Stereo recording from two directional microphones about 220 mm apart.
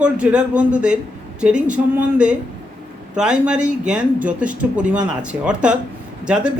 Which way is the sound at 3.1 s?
5° right (ahead or behind).